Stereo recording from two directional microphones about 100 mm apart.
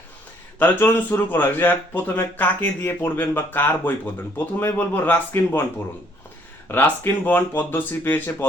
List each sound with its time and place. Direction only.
0.6 s a man's voice: 15° left (ahead or behind)
6.7 s a man's voice: 20° left (ahead or behind)